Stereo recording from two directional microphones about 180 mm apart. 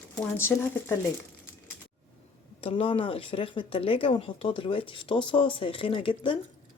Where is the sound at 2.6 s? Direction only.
30° left (ahead or behind).